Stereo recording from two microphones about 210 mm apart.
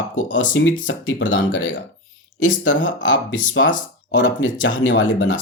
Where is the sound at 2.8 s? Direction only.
65° left (ahead or behind).